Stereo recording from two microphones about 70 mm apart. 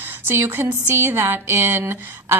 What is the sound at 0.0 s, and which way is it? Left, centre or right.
A woman's voice, right.